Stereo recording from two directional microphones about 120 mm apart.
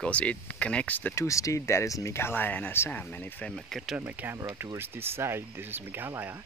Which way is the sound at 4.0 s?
20° right (ahead or behind).